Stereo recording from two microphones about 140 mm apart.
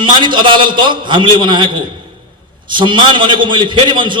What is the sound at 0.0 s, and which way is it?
A man's voice, 35° right (ahead or behind).